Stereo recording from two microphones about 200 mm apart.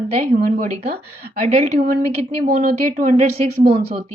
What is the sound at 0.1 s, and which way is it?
A woman's voice, 30° right (ahead or behind).